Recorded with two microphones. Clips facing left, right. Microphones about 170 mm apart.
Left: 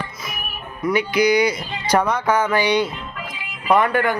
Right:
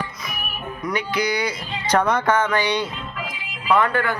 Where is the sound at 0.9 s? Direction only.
10° left (ahead or behind).